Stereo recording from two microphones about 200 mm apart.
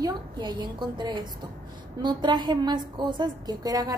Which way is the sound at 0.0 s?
20° right (ahead or behind).